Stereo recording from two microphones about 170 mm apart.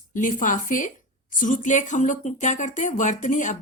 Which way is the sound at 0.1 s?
50° left (ahead or behind).